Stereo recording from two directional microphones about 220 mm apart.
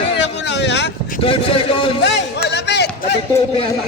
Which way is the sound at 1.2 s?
25° left (ahead or behind).